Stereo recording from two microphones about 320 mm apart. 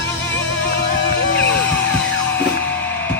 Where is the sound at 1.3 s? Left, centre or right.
Left.